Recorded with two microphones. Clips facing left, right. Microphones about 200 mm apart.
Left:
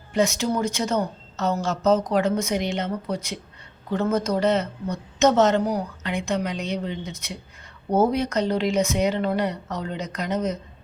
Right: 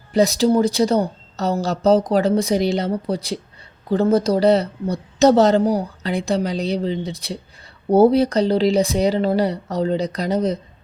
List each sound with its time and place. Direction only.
0.1 s a woman's voice: 35° right (ahead or behind)